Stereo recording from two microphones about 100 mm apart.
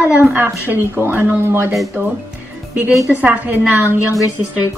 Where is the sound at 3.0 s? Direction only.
15° right (ahead or behind).